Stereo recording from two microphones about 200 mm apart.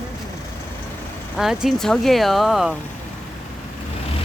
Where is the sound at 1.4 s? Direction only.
Centre (ahead or behind).